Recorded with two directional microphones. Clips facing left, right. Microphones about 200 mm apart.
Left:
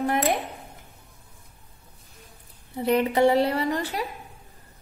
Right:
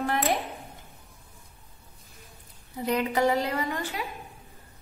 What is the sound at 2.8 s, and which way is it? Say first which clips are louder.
A woman's voice: left 5 dB; 25° left (ahead or behind).